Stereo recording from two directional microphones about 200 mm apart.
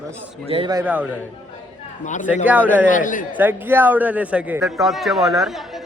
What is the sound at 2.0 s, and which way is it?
Speech, 40° left (ahead or behind).